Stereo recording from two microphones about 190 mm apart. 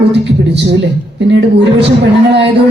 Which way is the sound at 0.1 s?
65° right (ahead or behind).